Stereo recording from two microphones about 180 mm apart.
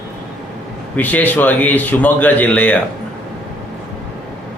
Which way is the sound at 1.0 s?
10° left (ahead or behind).